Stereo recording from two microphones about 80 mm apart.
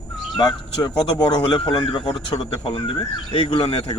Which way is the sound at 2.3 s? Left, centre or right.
Left.